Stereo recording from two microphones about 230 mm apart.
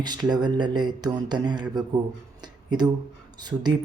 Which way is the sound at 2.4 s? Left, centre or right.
Centre.